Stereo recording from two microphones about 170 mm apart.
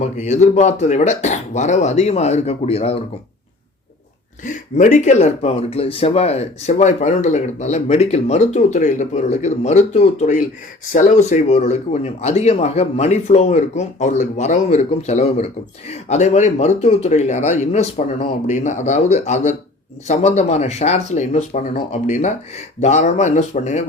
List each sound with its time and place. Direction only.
0.0 s speech: 40° left (ahead or behind)
4.4 s speech: 50° left (ahead or behind)